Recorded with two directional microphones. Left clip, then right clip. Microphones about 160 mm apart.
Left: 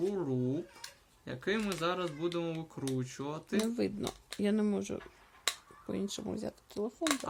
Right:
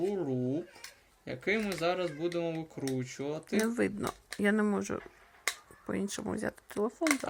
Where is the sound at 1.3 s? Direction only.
30° left (ahead or behind).